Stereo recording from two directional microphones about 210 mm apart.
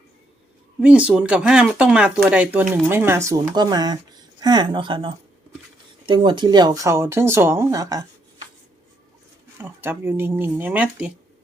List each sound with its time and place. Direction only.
0.8 s speech: 5° right (ahead or behind)
9.6 s speech: 10° right (ahead or behind)